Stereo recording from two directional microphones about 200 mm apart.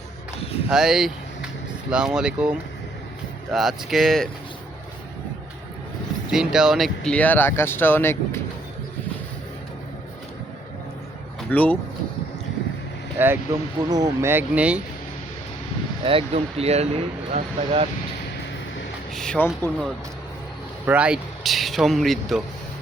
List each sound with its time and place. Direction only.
0.7 s speech: 5° right (ahead or behind)
6.3 s speech: centre (ahead or behind)
11.5 s speech: 5° left (ahead or behind)
13.1 s speech: 10° right (ahead or behind)
16.0 s speech: 30° right (ahead or behind)
19.1 s speech: 5° left (ahead or behind)
20.8 s speech: 5° right (ahead or behind)